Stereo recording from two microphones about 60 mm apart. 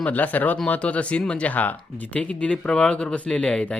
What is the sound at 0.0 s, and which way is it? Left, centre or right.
Speech, left.